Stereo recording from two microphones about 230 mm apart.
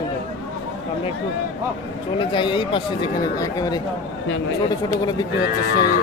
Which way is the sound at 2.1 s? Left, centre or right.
Left.